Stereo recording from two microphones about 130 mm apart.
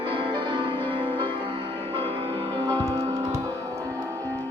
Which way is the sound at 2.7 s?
25° right (ahead or behind).